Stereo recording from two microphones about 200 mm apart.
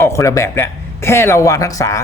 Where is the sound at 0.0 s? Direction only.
15° left (ahead or behind).